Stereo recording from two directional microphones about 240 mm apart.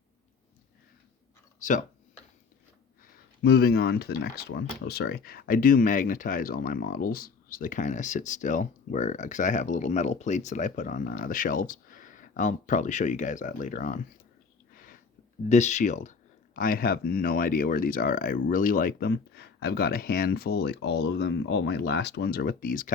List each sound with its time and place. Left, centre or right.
1.5 s speech: left
3.0 s speech: left
15.4 s speech: left